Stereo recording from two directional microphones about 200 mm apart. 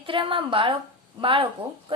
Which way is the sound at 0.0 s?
25° right (ahead or behind).